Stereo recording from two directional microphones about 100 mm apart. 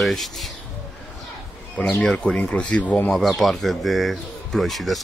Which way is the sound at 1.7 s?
10° left (ahead or behind).